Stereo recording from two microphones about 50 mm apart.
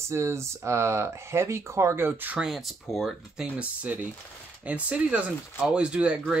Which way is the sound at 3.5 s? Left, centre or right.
Right.